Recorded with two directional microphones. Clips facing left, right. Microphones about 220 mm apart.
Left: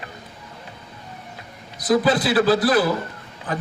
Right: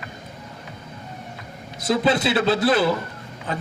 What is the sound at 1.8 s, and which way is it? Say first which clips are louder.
A man's voice: left 2 dB; 25° right (ahead or behind).